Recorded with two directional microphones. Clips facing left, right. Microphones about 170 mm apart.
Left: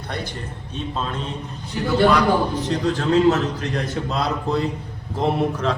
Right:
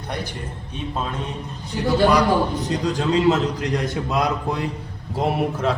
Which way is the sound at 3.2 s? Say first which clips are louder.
Even; 15° right (ahead or behind).